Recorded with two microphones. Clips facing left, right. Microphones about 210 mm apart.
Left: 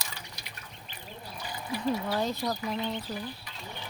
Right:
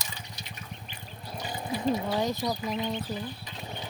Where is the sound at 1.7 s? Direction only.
20° right (ahead or behind).